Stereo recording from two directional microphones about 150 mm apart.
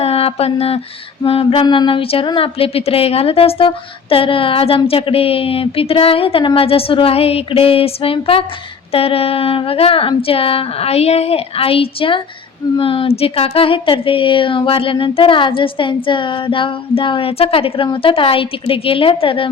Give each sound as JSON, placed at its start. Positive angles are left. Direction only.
{"t": 0.0, "sound": "mantra", "side_deg": 40}
{"t": 1.2, "sound": "speech", "side_deg": 40}